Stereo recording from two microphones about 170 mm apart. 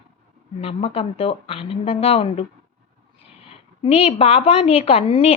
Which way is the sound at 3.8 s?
35° left (ahead or behind).